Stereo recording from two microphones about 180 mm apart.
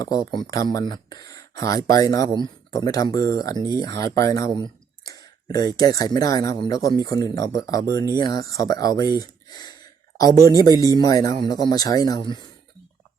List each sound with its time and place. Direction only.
0.0 s speech: 20° left (ahead or behind)